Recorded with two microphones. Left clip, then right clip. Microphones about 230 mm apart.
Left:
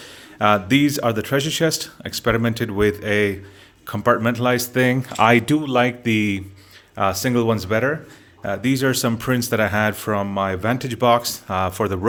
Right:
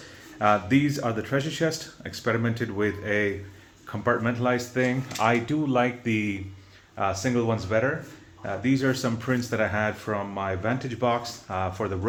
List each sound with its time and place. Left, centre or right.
0.3 s speech: left
6.9 s speech: left